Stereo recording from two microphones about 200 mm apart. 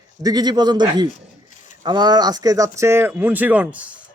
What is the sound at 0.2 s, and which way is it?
A man's voice, 20° right (ahead or behind).